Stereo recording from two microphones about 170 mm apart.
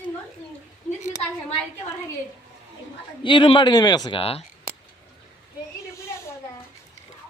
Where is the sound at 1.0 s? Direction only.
45° left (ahead or behind).